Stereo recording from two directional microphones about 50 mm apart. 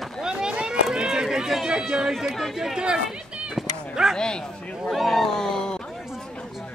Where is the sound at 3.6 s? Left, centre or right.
Centre.